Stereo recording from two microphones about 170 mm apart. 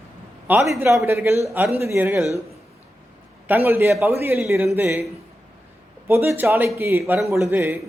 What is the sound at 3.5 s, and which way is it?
A man's voice, 10° right (ahead or behind).